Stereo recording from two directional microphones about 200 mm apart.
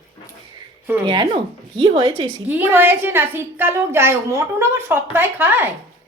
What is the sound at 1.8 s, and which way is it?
Speech, 25° right (ahead or behind).